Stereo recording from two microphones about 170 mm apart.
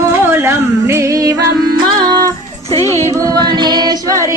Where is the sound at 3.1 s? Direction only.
20° right (ahead or behind).